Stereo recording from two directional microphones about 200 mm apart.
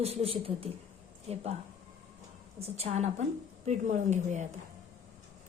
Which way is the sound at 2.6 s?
30° right (ahead or behind).